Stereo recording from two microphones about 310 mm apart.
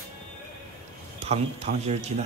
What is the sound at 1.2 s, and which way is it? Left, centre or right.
Speech, right.